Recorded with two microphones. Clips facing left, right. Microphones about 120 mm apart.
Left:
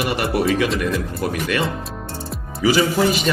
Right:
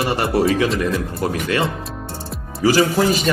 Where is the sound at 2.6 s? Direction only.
40° right (ahead or behind).